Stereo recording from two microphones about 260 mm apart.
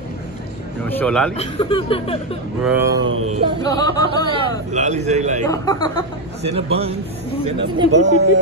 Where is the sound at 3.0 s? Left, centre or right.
Right.